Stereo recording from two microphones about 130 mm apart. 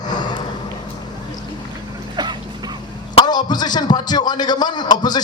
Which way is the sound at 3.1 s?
35° left (ahead or behind).